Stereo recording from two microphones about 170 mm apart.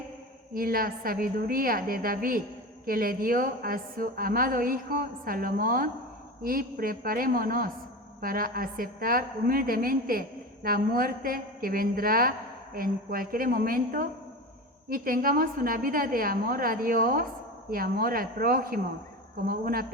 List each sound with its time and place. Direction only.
0.5 s a woman's voice: 60° right (ahead or behind)